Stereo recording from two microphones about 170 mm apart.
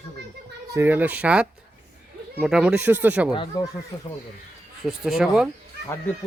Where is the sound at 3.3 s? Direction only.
20° left (ahead or behind).